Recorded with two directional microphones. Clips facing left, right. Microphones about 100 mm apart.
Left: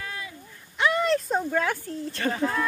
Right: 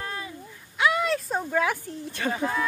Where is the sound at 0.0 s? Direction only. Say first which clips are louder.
Right 2 dB; 35° right (ahead or behind).